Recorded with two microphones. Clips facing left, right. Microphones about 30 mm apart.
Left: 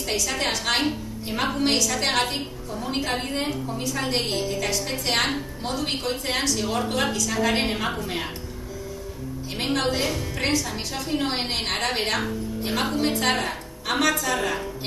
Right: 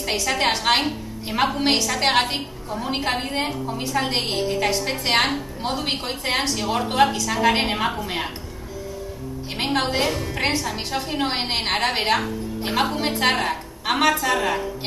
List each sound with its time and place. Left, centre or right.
0.1 s a woman's voice: right
1.9 s a woman's voice: right
9.6 s a woman's voice: right
9.9 s a woman's voice: right
10.4 s a woman's voice: right